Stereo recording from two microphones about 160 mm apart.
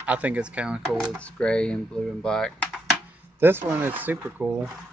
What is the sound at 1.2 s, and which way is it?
Speech, 5° left (ahead or behind).